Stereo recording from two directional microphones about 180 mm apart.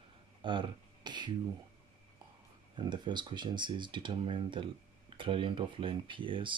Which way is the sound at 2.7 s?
25° right (ahead or behind).